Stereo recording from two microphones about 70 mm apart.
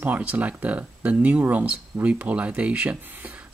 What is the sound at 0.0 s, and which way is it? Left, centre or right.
Speech, right.